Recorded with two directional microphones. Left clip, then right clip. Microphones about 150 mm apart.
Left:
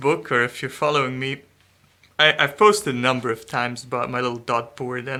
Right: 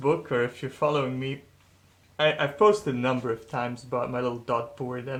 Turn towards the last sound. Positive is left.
turn(degrees=20)  # may be behind; listen again after turning